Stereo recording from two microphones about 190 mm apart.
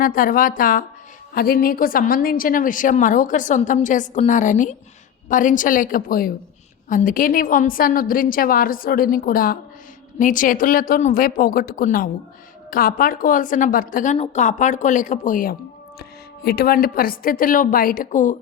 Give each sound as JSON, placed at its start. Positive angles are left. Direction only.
{"t": 0.0, "sound": "a woman's voice", "side_deg": 45}
{"t": 16.0, "sound": "a woman's voice", "side_deg": 55}